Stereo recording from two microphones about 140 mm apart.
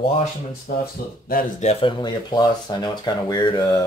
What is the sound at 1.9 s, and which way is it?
Speech, 30° left (ahead or behind).